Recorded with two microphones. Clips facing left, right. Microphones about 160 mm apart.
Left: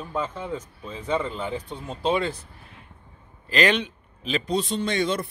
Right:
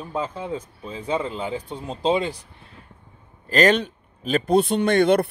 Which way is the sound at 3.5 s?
45° right (ahead or behind).